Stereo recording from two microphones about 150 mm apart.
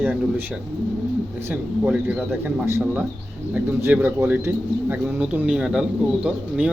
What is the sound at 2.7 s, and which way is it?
Speech, 15° right (ahead or behind).